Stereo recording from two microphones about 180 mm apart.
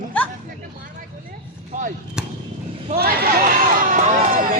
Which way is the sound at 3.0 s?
55° right (ahead or behind).